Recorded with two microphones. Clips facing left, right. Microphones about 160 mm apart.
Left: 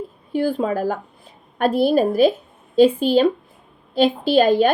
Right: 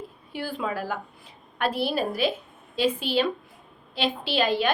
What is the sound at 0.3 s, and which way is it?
A woman's voice, 40° left (ahead or behind).